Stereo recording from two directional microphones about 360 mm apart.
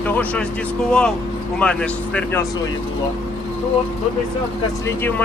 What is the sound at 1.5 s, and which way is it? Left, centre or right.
Speech, centre.